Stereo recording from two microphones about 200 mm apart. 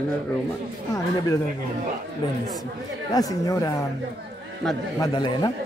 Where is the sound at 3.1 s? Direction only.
20° left (ahead or behind).